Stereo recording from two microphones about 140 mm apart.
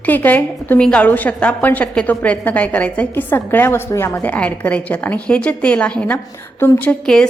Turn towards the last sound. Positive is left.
turn(degrees=10)  # may be behind; listen again after turning